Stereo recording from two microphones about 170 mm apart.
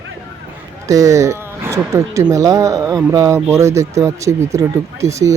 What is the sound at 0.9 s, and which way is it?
Speech, 20° right (ahead or behind).